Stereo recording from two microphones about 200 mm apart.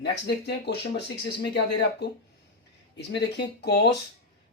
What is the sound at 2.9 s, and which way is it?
Speech, 60° left (ahead or behind).